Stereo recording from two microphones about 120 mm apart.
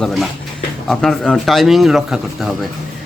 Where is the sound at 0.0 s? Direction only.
Centre (ahead or behind).